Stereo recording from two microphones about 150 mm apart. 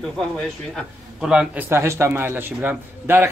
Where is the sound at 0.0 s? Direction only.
Centre (ahead or behind).